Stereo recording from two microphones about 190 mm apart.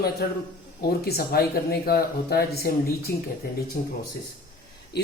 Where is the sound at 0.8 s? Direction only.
55° left (ahead or behind).